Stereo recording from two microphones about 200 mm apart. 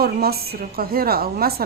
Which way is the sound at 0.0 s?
50° right (ahead or behind).